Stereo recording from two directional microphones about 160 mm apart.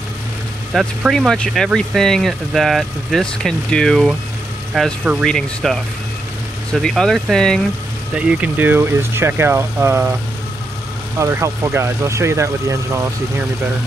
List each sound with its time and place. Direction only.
0.7 s speech: centre (ahead or behind)
8.1 s speech: 5° right (ahead or behind)
11.1 s speech: 20° right (ahead or behind)